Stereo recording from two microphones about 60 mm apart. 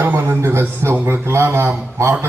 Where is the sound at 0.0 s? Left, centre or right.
Right.